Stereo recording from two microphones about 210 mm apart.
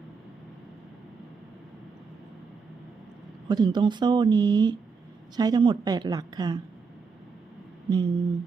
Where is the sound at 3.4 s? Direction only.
20° right (ahead or behind).